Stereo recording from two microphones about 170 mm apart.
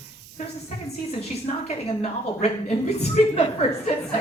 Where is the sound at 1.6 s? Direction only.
40° left (ahead or behind).